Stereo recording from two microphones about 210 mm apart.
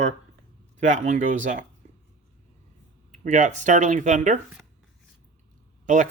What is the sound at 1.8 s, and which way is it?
Burping, 40° right (ahead or behind).